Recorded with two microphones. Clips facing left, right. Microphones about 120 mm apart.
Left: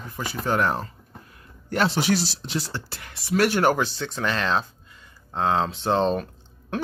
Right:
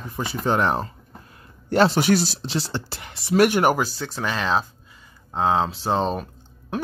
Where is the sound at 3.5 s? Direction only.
10° right (ahead or behind).